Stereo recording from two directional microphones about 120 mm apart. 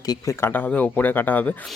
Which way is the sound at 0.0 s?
30° left (ahead or behind).